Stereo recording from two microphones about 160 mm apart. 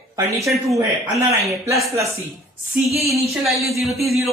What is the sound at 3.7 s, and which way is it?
Speech, centre (ahead or behind).